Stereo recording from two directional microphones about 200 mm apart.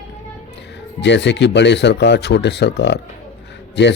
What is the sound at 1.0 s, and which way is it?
A man's voice, 60° left (ahead or behind).